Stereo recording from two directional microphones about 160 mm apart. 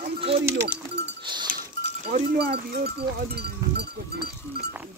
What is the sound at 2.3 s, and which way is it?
Speech, 80° right.